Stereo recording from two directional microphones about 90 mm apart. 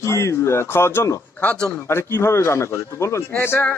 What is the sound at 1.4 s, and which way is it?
Speech, 10° left (ahead or behind).